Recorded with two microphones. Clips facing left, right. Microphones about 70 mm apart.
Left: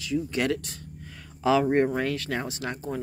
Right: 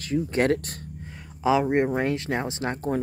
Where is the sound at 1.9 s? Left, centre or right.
Right.